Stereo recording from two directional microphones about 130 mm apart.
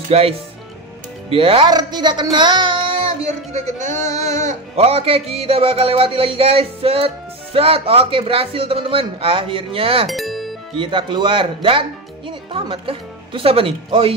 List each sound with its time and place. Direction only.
0.1 s a man's voice: 50° right (ahead or behind)
1.7 s speech: 35° right (ahead or behind)
2.3 s music: 35° right (ahead or behind)
3.5 s speech: 70° right (ahead or behind)
3.9 s a sound: 25° left (ahead or behind)
4.7 s a man's voice: 50° right (ahead or behind)
10.0 s music: centre (ahead or behind)
10.8 s a man's voice: 40° right (ahead or behind)